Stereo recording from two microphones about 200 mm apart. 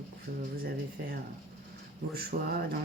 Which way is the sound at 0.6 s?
50° right (ahead or behind).